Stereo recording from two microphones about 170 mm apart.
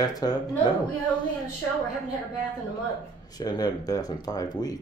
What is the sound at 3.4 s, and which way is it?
Speech, 25° left (ahead or behind).